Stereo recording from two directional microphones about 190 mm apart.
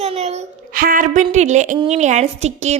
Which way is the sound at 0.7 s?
50° right (ahead or behind).